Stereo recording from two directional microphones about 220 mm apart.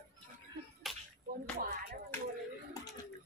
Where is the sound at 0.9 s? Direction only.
Centre (ahead or behind).